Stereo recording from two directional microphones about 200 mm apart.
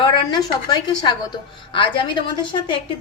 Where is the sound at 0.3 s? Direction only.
20° left (ahead or behind).